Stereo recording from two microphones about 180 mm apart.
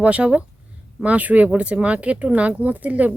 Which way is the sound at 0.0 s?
5° right (ahead or behind).